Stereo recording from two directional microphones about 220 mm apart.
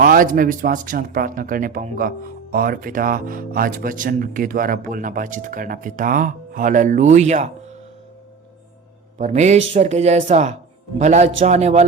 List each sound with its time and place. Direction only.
0.0 s speech: 40° right (ahead or behind)
9.1 s speech: 30° right (ahead or behind)